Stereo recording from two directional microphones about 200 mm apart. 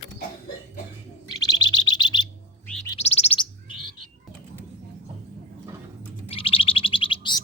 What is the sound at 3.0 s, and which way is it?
Chirp, 30° left (ahead or behind).